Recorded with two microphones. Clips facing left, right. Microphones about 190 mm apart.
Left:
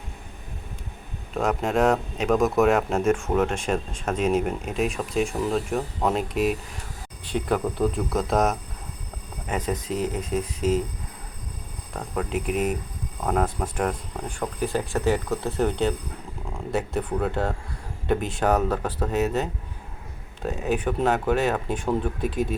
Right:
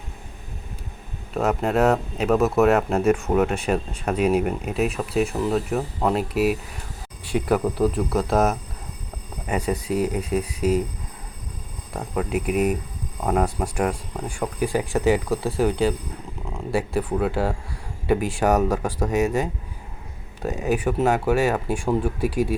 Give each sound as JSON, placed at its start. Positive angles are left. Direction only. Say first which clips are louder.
{"t": 1.3, "sound": "speech", "louder": "right 2 dB", "side_deg": -5}
{"t": 11.9, "sound": "speech", "louder": "right 3 dB", "side_deg": -5}